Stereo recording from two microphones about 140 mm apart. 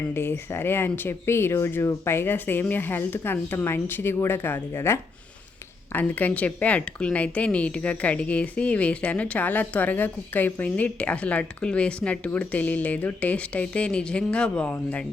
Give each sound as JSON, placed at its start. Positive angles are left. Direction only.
{"t": 0.1, "sound": "speech", "side_deg": 15}